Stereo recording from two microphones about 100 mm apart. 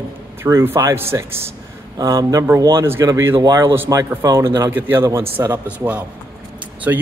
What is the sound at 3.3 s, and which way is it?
Speech, 40° right (ahead or behind).